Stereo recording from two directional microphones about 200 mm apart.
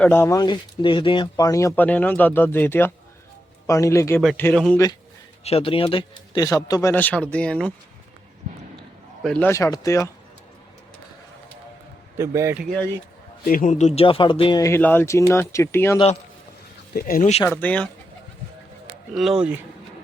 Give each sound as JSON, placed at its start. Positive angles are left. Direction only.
{"t": 0.0, "sound": "speech", "side_deg": 10}
{"t": 5.4, "sound": "speech", "side_deg": 30}
{"t": 9.2, "sound": "speech", "side_deg": 5}
{"t": 12.1, "sound": "a man's voice", "side_deg": -15}
{"t": 13.4, "sound": "speech", "side_deg": 45}
{"t": 16.9, "sound": "speech", "side_deg": 45}
{"t": 17.4, "sound": "speech", "side_deg": 10}
{"t": 19.1, "sound": "speech", "side_deg": 0}